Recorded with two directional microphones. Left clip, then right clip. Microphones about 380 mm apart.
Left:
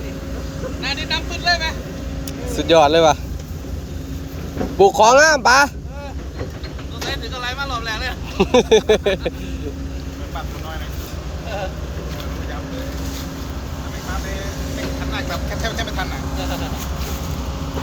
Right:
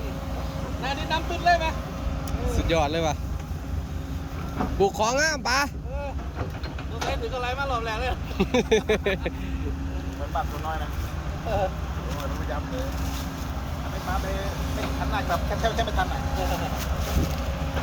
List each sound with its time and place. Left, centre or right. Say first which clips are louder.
0.8 s vehicle: left 5 dB; right
2.6 s speech: left 13 dB; centre
4.8 s speech: left 12 dB; centre
7.1 s vehicle: left 3 dB; right
8.4 s speech: left 9 dB; centre
15.1 s vehicle: right 2 dB; right